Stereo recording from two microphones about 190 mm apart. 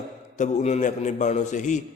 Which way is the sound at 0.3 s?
40° left (ahead or behind).